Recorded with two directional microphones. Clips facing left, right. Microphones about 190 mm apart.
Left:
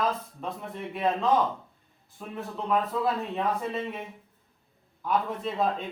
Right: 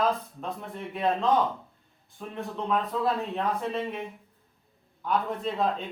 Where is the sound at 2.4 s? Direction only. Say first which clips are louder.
Left 1 dB; centre (ahead or behind).